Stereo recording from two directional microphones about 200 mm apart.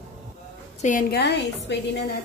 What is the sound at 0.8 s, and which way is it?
A woman's voice, 40° left (ahead or behind).